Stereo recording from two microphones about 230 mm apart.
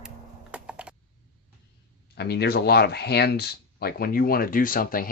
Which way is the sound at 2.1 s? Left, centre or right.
Left.